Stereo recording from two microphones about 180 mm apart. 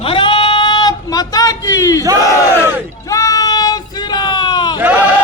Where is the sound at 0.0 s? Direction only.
30° left (ahead or behind).